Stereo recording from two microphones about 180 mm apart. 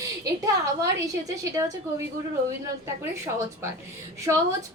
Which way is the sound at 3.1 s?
15° right (ahead or behind).